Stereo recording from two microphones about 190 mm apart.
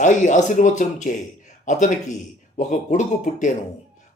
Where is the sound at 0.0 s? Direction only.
40° left (ahead or behind).